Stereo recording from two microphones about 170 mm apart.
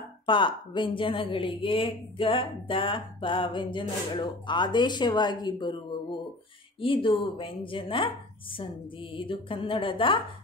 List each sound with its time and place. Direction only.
0.3 s a woman's voice: 30° left (ahead or behind)
6.8 s speech: 30° left (ahead or behind)